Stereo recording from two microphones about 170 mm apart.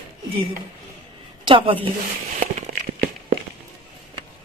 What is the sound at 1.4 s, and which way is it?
Speech, 30° right (ahead or behind).